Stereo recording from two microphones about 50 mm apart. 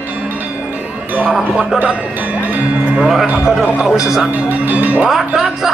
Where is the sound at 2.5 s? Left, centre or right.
Right.